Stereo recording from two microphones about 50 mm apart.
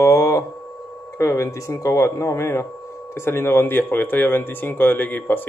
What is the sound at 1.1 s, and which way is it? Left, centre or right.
A man's voice, left.